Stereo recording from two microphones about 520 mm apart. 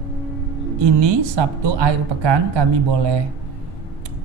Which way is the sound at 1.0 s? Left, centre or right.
Right.